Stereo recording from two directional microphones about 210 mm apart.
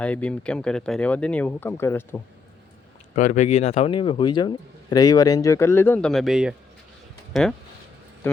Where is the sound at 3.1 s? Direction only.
35° left (ahead or behind); by 7.5 s 5° left (ahead or behind).